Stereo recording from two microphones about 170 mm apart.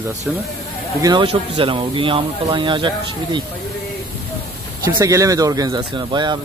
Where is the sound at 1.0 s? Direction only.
30° right (ahead or behind).